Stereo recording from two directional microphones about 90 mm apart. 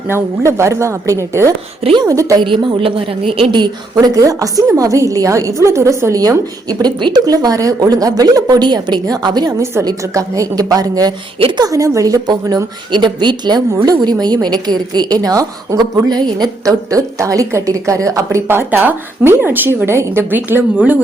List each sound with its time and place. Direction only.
0.1 s a woman's voice: 30° right (ahead or behind)
2.5 s speech: 80° right
4.0 s a woman's voice: 40° right (ahead or behind)
9.5 s a woman's voice: 30° right (ahead or behind)
11.3 s a woman's voice: 90° right
11.6 s a woman's voice: 40° right (ahead or behind)
16.0 s a woman's voice: 50° right (ahead or behind); by 21.0 s 20° right (ahead or behind)